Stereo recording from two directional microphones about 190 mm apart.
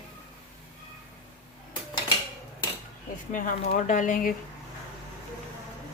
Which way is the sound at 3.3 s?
45° left (ahead or behind).